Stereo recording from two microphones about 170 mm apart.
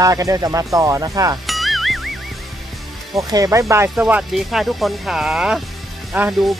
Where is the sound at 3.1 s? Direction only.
20° right (ahead or behind).